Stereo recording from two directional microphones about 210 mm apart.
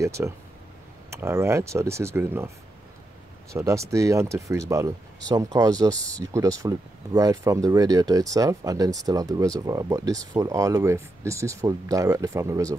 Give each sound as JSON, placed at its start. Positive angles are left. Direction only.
{"t": 0.0, "sound": "speech", "side_deg": -15}
{"t": 3.5, "sound": "speech", "side_deg": -15}